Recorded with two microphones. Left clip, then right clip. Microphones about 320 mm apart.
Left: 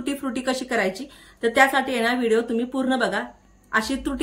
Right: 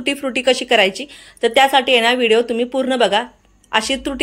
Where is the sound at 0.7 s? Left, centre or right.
Centre.